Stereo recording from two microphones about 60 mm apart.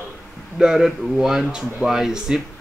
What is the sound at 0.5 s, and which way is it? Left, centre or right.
Speech, centre.